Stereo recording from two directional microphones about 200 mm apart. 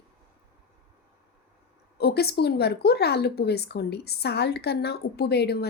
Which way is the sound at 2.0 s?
55° left (ahead or behind).